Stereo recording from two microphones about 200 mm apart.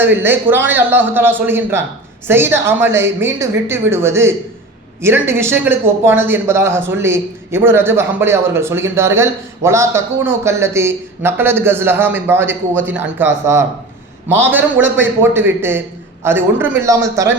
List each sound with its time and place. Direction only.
0.0 s speech: 10° right (ahead or behind)